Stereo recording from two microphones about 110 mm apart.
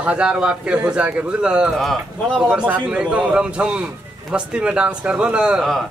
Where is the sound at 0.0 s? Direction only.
10° right (ahead or behind).